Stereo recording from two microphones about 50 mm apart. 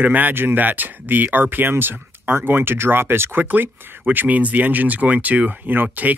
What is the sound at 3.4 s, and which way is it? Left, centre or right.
Speech, right.